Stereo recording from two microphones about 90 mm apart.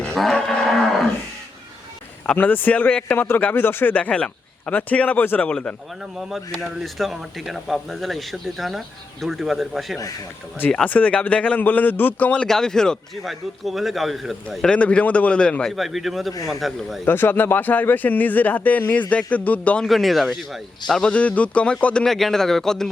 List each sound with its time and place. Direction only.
0.0 s cattle: 10° left (ahead or behind)
2.3 s a man's voice: 20° left (ahead or behind)
6.0 s speech: 5° right (ahead or behind)
10.8 s a man's voice: 15° left (ahead or behind)
15.7 s speech: centre (ahead or behind)
17.1 s speech: 25° left (ahead or behind)
19.9 s speech: centre (ahead or behind)
21.1 s a man's voice: 15° left (ahead or behind)